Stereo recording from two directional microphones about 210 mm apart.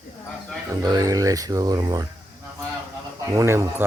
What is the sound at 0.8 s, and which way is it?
Speech, 20° right (ahead or behind).